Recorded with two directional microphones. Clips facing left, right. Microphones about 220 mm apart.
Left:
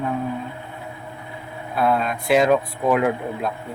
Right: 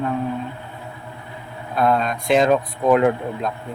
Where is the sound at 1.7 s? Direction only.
5° left (ahead or behind).